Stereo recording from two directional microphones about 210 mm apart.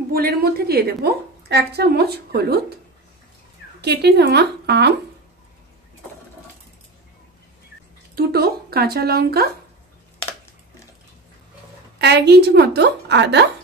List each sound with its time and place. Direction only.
0.1 s a woman's voice: 45° right (ahead or behind)
3.8 s a woman's voice: 50° right (ahead or behind)
8.2 s a woman's voice: 45° right (ahead or behind)
12.0 s a woman's voice: 50° right (ahead or behind)